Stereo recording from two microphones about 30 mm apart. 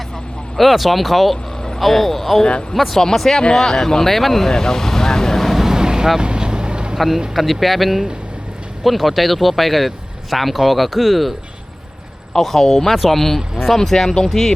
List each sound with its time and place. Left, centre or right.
0.5 s speech: centre
2.4 s speech: left
2.9 s speech: centre
4.4 s speech: left
5.5 s vehicle: centre; by 6.9 s right
7.3 s speech: centre
12.4 s speech: centre